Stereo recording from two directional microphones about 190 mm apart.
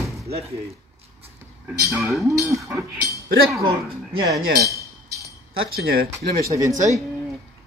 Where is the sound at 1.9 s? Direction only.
Centre (ahead or behind).